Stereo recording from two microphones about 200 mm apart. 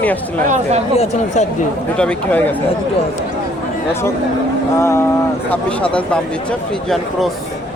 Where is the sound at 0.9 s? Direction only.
35° left (ahead or behind).